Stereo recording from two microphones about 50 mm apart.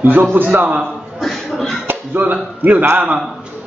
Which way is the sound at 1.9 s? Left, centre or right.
Right.